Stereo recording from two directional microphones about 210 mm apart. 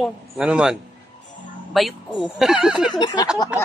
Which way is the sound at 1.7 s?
Centre (ahead or behind).